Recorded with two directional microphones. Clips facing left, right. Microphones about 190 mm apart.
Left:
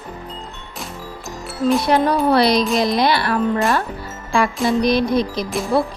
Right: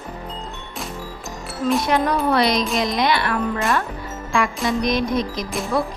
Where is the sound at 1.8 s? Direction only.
30° left (ahead or behind).